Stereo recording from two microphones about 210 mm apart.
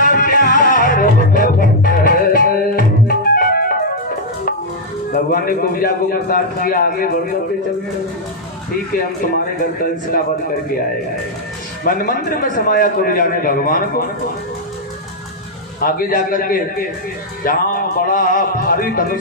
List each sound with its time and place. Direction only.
0.0 s music: 40° left (ahead or behind)
5.1 s a man's voice: 45° left (ahead or behind)
9.2 s speech: 40° left (ahead or behind)
11.8 s a man's voice: 40° left (ahead or behind)
15.8 s a man's voice: 40° left (ahead or behind)